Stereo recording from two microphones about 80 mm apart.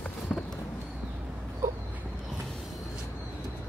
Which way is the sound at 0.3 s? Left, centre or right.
Centre.